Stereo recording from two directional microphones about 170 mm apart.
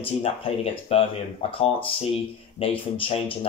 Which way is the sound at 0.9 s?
35° left (ahead or behind).